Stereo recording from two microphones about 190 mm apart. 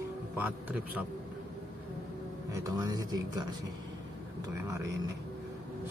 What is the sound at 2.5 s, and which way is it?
Speech, 20° right (ahead or behind).